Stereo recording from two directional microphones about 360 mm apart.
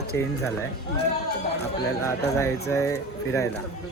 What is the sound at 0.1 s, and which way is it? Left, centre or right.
Speech, left.